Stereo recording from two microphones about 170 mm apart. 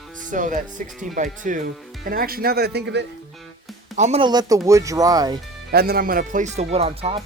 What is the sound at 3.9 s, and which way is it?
Speech, 45° right (ahead or behind).